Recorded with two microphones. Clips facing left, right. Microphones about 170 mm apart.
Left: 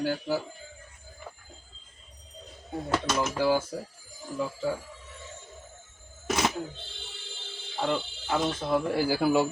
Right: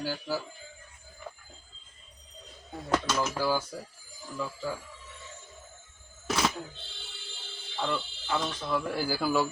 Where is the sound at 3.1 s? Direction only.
20° left (ahead or behind).